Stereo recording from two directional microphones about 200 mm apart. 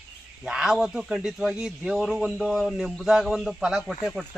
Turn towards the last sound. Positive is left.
turn(degrees=5)  # may be behind; listen again after turning